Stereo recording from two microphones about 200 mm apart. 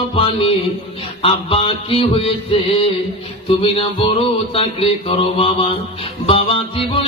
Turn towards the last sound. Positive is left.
turn(degrees=30)  # may be behind; listen again after turning